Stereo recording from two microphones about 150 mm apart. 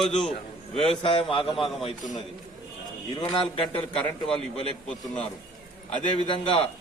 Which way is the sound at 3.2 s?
35° left (ahead or behind).